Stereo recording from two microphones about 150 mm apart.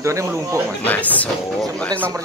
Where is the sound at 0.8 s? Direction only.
10° left (ahead or behind).